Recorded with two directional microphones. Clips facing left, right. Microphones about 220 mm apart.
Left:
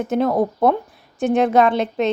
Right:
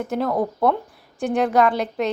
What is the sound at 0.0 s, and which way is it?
A woman's voice, 20° left (ahead or behind).